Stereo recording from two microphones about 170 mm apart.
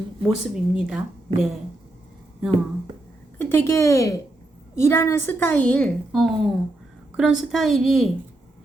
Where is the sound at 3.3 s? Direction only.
15° left (ahead or behind).